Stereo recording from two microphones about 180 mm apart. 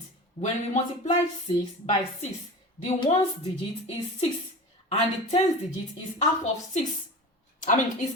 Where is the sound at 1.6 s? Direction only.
30° left (ahead or behind).